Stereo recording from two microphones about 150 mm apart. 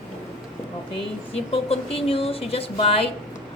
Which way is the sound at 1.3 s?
40° left (ahead or behind).